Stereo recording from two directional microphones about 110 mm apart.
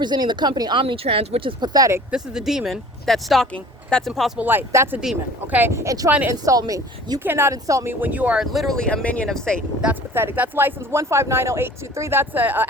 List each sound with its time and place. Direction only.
0.0 s speech: 40° right (ahead or behind)
0.8 s speech: 55° right (ahead or behind)
1.6 s speech: 35° right (ahead or behind)
2.0 s speech: 5° right (ahead or behind)
4.4 s speech: 20° right (ahead or behind)
4.9 s speech: 10° right (ahead or behind); by 6.1 s 30° right (ahead or behind)
6.1 s speech: 15° right (ahead or behind)
6.4 s speech: 30° right (ahead or behind)
7.3 s speech: 20° right (ahead or behind)
8.0 s speech: 15° right (ahead or behind); by 9.6 s 5° left (ahead or behind)
9.8 s speech: 20° right (ahead or behind)